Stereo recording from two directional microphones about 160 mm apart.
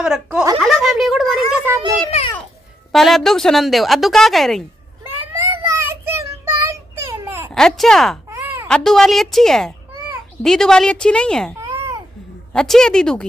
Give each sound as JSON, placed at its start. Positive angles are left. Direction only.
{"t": 0.0, "sound": "a woman's voice", "side_deg": -5}
{"t": 0.6, "sound": "a sound", "side_deg": 0}
{"t": 2.0, "sound": "a child's voice", "side_deg": 40}
{"t": 2.9, "sound": "a woman's voice", "side_deg": 0}
{"t": 5.6, "sound": "child singing", "side_deg": -20}
{"t": 7.5, "sound": "a woman's voice", "side_deg": 5}
{"t": 8.3, "sound": "a sound", "side_deg": -15}
{"t": 8.6, "sound": "a woman's voice", "side_deg": 5}
{"t": 11.6, "sound": "babbling", "side_deg": -20}
{"t": 12.5, "sound": "a woman's voice", "side_deg": 5}